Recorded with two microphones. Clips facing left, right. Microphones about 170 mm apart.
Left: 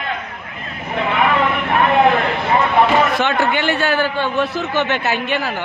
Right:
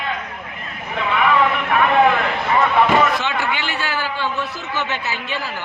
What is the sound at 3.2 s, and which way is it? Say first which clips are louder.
A man's voice: left 6 dB; 55° left (ahead or behind).